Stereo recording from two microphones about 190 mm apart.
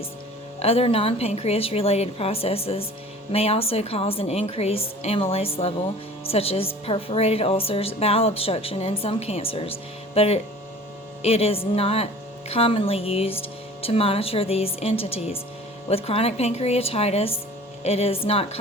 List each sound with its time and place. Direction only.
0.6 s a woman's voice: 30° left (ahead or behind)